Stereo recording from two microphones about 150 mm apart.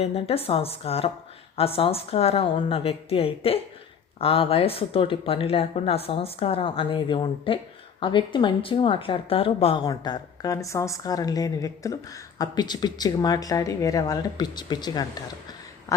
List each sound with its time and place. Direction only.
0.0 s a woman's voice: 45° left (ahead or behind)
9.8 s speech: 25° left (ahead or behind)